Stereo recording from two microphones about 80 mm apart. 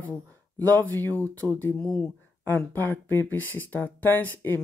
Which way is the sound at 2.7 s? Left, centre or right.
Left.